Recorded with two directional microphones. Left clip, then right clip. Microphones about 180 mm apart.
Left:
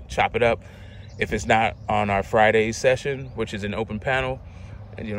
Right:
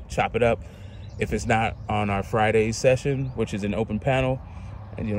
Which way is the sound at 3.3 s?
15° right (ahead or behind).